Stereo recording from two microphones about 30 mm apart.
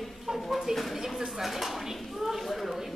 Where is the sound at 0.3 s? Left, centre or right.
Right.